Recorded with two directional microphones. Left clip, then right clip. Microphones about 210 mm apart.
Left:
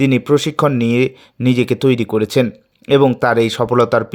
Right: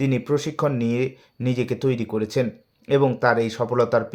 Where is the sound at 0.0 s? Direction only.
40° left (ahead or behind).